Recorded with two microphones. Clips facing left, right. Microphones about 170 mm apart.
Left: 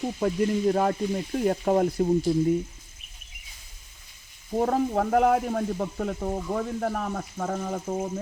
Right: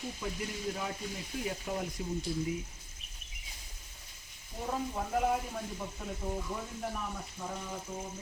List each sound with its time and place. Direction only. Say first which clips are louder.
0.2 s speech: left 18 dB; 55° left (ahead or behind)
4.5 s speech: left 12 dB; 65° left (ahead or behind)